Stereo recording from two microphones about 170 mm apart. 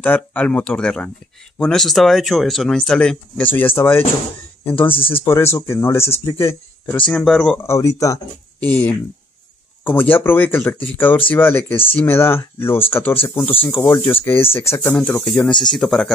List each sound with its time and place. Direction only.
0.0 s speech: 10° left (ahead or behind)
7.1 s speech: 5° left (ahead or behind)
7.5 s speech: 15° left (ahead or behind)
8.5 s speech: 10° left (ahead or behind)